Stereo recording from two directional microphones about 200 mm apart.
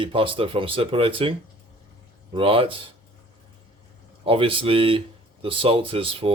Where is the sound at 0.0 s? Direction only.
25° right (ahead or behind).